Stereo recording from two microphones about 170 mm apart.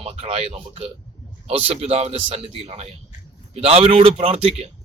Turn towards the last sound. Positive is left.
turn(degrees=-35)  # may be behind; listen again after turning